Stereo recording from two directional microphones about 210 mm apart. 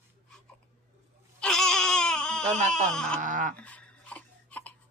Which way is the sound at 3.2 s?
40° right (ahead or behind).